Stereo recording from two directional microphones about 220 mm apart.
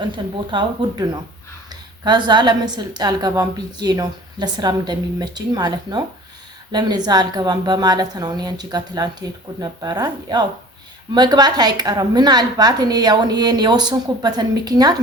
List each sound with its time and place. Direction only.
0.2 s a woman's voice: 20° right (ahead or behind)